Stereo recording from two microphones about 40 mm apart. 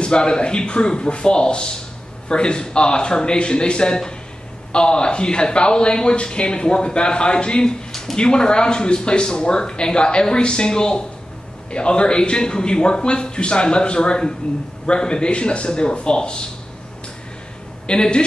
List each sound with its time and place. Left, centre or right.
0.0 s speech: left
17.8 s speech: left